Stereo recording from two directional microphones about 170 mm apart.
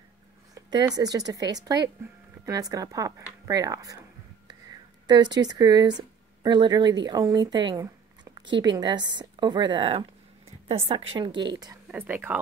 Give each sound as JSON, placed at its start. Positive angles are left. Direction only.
{"t": 0.6, "sound": "a sound", "side_deg": -25}
{"t": 1.1, "sound": "a woman's voice", "side_deg": -20}
{"t": 11.9, "sound": "speech", "side_deg": -10}